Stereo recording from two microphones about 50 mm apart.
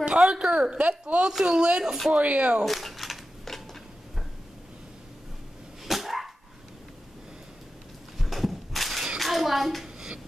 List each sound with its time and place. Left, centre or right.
0.0 s a woman's voice: centre
2.6 s a sound: centre
5.9 s dog: centre
8.2 s a sound: centre
9.2 s hands: centre
9.9 s music: centre